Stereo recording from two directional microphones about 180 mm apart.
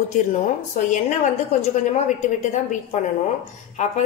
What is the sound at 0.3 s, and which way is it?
A woman's voice, 40° left (ahead or behind).